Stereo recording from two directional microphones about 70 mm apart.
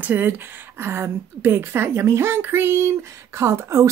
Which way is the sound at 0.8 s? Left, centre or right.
Right.